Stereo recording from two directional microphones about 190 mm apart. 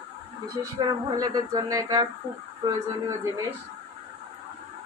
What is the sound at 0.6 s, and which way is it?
Speech, 20° right (ahead or behind).